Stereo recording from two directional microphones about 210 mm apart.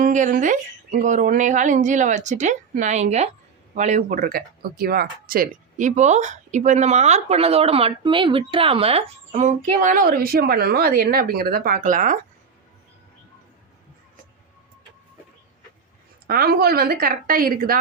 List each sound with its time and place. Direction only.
0.0 s speech: 40° right (ahead or behind)
16.2 s a woman's voice: 45° right (ahead or behind)